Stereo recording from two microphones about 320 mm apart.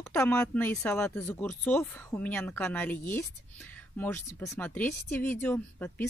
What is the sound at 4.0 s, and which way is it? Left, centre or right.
Speech, centre.